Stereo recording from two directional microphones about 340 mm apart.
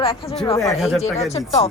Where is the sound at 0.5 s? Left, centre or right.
Centre.